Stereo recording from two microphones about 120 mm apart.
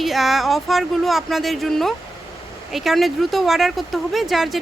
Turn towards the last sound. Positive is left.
turn(degrees=0)  # may be behind; listen again after turning